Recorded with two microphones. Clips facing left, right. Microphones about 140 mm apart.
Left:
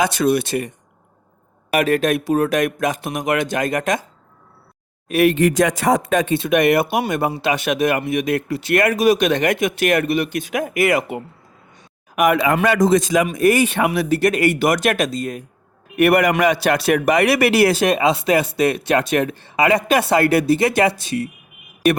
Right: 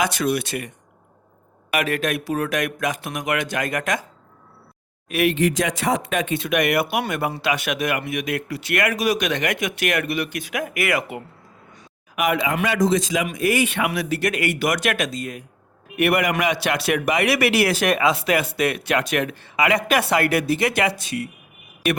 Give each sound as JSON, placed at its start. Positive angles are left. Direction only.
{"t": 0.0, "sound": "speech", "side_deg": 25}
{"t": 1.7, "sound": "speech", "side_deg": 35}
{"t": 5.0, "sound": "speech", "side_deg": 35}
{"t": 12.1, "sound": "speech", "side_deg": 50}